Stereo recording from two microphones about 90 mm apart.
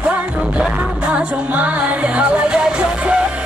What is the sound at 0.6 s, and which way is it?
Music, 10° right (ahead or behind).